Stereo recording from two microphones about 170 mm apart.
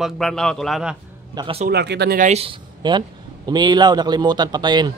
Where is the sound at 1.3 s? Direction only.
25° right (ahead or behind).